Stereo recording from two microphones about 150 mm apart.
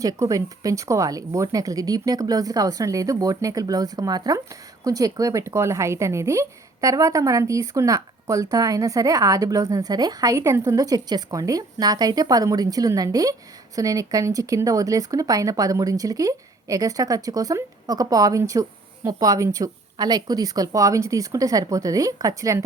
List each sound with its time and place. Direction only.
0.0 s speech: 25° right (ahead or behind)